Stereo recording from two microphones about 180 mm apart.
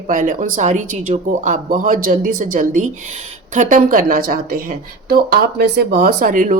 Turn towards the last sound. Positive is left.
turn(degrees=-50)  # may be behind; listen again after turning